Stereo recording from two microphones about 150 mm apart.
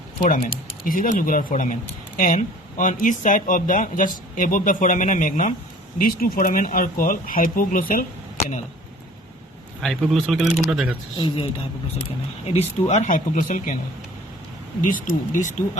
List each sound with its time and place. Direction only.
0.2 s speech: 65° left (ahead or behind)
6.0 s speech: 75° left (ahead or behind)
9.8 s speech: centre (ahead or behind)
12.5 s speech: 50° left (ahead or behind)
14.8 s speech: 60° left (ahead or behind)